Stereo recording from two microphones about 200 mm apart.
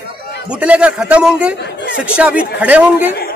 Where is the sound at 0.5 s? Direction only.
5° right (ahead or behind).